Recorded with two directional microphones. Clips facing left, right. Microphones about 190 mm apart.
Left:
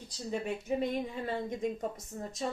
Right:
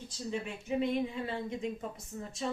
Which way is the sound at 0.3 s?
40° left (ahead or behind).